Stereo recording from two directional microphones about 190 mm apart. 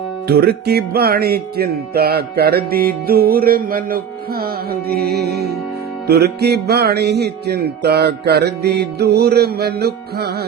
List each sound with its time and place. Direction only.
0.3 s music: 55° right (ahead or behind)